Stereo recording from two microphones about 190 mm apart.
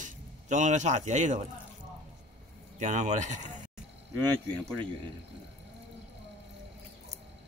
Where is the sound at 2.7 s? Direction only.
40° right (ahead or behind).